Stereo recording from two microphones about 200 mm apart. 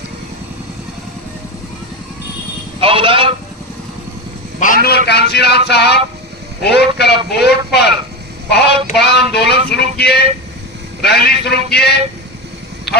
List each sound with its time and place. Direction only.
2.8 s speech: 25° right (ahead or behind)
4.6 s a man's voice: 45° left (ahead or behind)
12.9 s a sound: 55° left (ahead or behind)